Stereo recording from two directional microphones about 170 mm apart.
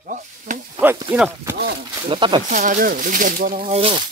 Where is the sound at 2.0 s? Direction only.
30° right (ahead or behind).